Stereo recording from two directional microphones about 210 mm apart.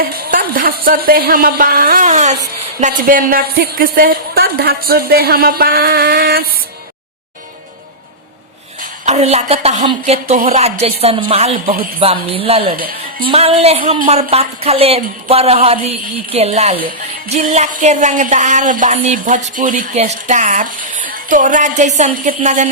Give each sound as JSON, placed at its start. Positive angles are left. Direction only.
{"t": 0.0, "sound": "a woman's voice", "side_deg": -40}
{"t": 8.8, "sound": "a woman's voice", "side_deg": -30}
{"t": 12.7, "sound": "music", "side_deg": -40}
{"t": 13.3, "sound": "a woman's voice", "side_deg": -30}
{"t": 16.3, "sound": "music", "side_deg": -30}